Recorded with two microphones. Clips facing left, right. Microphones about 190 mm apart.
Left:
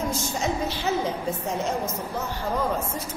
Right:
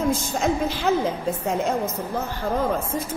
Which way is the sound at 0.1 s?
55° right (ahead or behind).